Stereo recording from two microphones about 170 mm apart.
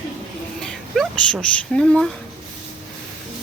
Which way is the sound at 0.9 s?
5° left (ahead or behind).